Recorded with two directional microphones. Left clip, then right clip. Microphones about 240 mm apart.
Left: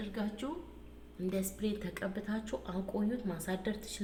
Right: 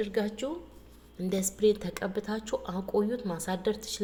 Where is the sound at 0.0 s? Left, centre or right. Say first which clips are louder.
Right 10 dB; right.